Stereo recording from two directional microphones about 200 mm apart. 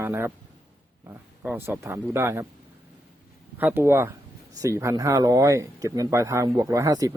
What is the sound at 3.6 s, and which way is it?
Speech, 10° right (ahead or behind).